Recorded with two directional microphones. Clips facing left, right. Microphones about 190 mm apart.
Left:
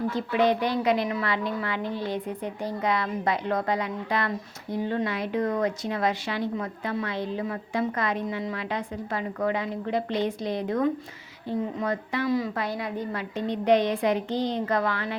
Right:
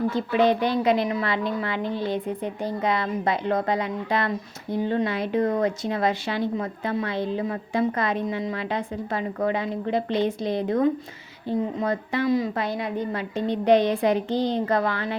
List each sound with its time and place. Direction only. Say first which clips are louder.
0.1 s speech: right 1 dB; 30° right (ahead or behind)